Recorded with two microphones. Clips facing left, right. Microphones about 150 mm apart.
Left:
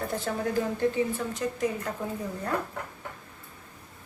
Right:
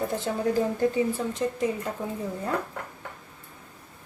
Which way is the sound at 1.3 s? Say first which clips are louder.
Right 2 dB; 25° right (ahead or behind).